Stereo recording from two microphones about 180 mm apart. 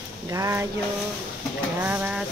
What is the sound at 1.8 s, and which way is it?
Speech, 10° right (ahead or behind).